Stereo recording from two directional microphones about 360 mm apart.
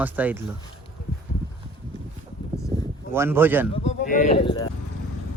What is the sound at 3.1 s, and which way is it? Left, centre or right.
Speech, centre.